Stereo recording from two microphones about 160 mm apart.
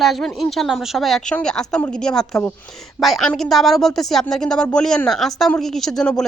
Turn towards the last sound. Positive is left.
turn(degrees=0)  # may be behind; listen again after turning